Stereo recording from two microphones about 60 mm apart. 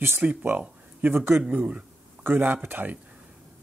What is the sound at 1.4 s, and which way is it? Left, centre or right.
Speech, right.